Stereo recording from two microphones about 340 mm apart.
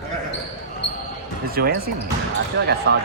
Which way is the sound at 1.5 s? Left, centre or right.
Right.